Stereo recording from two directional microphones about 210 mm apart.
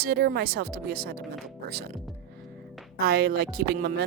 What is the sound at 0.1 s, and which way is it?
A woman's voice, 50° right (ahead or behind).